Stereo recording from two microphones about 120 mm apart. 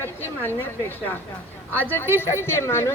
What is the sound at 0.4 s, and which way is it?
A woman's voice, 15° left (ahead or behind).